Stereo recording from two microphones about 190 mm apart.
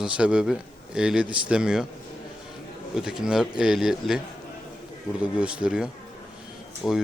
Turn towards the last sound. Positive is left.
turn(degrees=0)  # may be behind; listen again after turning